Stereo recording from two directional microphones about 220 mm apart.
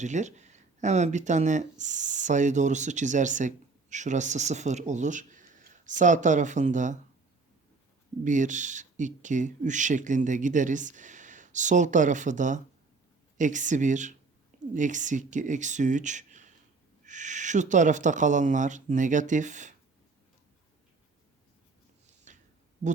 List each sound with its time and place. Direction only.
0.0 s speech: 35° right (ahead or behind)
8.2 s speech: 35° right (ahead or behind)
22.3 s a sound: 35° right (ahead or behind)